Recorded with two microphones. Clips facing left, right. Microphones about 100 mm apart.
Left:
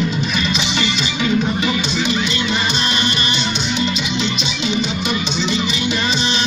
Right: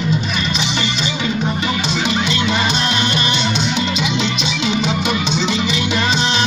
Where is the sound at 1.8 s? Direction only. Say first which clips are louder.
Right 1 dB; 90° right.